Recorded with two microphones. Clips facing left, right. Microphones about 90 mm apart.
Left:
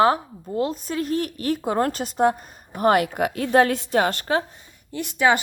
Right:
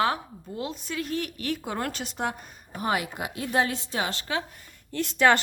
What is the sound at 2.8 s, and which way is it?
A woman's voice, 55° left (ahead or behind).